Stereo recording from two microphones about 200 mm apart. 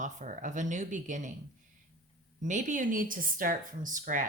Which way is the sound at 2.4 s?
40° right (ahead or behind).